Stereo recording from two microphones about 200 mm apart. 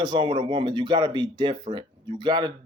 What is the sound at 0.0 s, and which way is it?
Speech, 20° right (ahead or behind).